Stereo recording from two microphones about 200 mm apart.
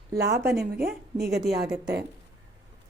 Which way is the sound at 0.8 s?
50° right (ahead or behind).